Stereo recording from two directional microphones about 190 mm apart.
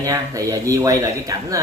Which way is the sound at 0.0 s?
20° right (ahead or behind).